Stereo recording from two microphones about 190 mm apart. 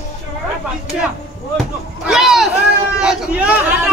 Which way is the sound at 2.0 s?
Centre (ahead or behind).